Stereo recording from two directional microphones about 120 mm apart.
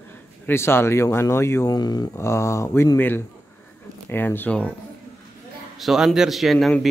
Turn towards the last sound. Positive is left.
turn(degrees=0)  # may be behind; listen again after turning